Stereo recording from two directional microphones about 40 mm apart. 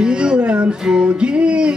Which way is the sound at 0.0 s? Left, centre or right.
Right.